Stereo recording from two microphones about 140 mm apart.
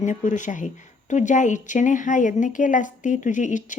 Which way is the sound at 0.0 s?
60° left (ahead or behind).